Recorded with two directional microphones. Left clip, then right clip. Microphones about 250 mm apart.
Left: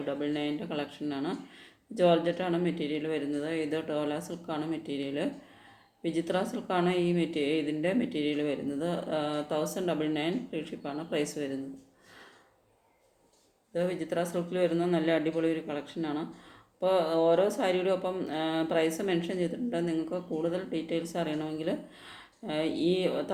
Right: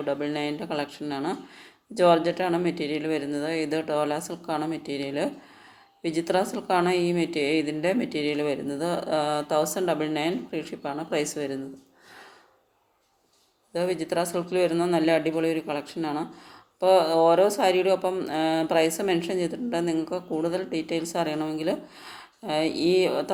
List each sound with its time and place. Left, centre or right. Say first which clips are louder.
0.0 s a woman's voice: right 4 dB; centre
13.7 s a woman's voice: right 5 dB; centre